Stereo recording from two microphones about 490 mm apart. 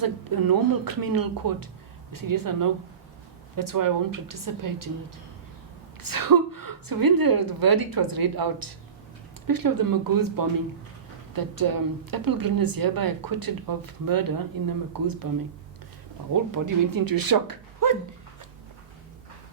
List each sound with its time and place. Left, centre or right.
0.0 s a woman's voice: right
6.0 s a woman's voice: right
16.3 s a woman's voice: right